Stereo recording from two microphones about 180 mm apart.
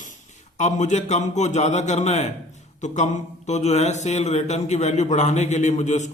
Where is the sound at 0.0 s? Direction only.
45° left (ahead or behind).